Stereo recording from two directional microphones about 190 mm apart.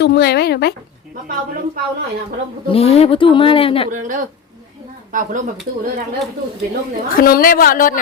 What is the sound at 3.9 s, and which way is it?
Speech, 45° right (ahead or behind).